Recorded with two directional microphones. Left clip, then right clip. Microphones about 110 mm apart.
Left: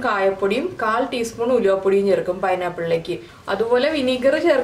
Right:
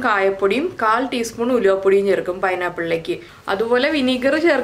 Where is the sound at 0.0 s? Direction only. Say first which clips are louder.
Right 2 dB; 30° right (ahead or behind).